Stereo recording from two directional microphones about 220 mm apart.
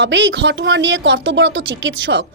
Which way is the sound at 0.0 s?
55° right (ahead or behind).